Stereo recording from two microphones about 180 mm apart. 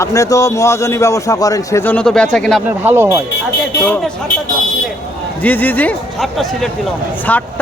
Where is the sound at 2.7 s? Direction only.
10° right (ahead or behind).